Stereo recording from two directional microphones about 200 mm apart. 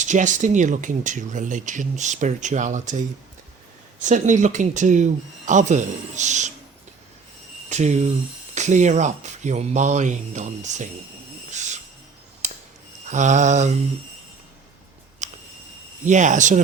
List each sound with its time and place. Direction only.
0.0 s speech: 40° right (ahead or behind)
4.0 s speech: 40° right (ahead or behind)
7.7 s speech: 35° right (ahead or behind)
11.5 s a sound: 35° right (ahead or behind)
12.4 s mechanisms: 35° right (ahead or behind)
13.1 s speech: 35° right (ahead or behind)
15.2 s a sound: 35° right (ahead or behind)
16.0 s speech: 35° right (ahead or behind)